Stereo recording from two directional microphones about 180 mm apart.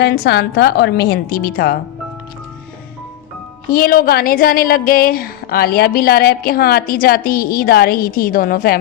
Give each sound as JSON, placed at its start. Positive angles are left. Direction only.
{"t": 0.0, "sound": "a woman's voice", "side_deg": 65}
{"t": 3.7, "sound": "a woman's voice", "side_deg": 55}